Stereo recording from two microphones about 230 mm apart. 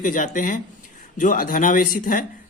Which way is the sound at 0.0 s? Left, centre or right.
Left.